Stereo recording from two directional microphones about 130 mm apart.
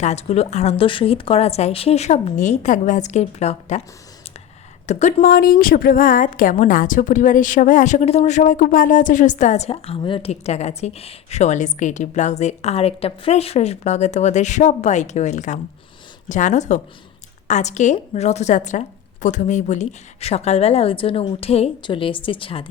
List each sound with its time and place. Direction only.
0.0 s a woman's voice: 55° left (ahead or behind)
4.9 s a woman's voice: 60° left (ahead or behind); by 22.7 s 45° left (ahead or behind)